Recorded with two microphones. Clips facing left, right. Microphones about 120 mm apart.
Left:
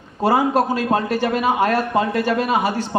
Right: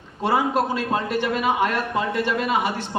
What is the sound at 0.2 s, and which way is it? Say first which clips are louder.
Speech: left 4 dB; 40° left (ahead or behind).